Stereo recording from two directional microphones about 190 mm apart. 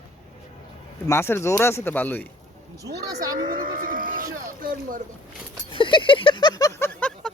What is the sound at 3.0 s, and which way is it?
Speech, 20° right (ahead or behind).